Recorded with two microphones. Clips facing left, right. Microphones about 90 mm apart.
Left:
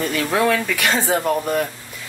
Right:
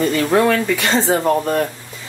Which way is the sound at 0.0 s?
Centre (ahead or behind).